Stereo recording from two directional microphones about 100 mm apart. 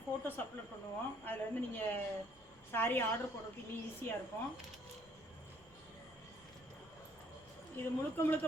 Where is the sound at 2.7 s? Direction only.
20° left (ahead or behind).